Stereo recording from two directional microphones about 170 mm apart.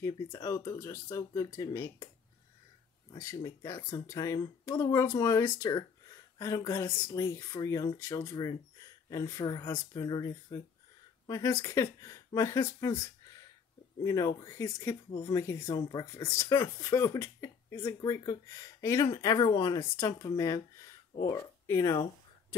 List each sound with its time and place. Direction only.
0.0 s speech: 20° left (ahead or behind)
3.1 s speech: 20° left (ahead or behind)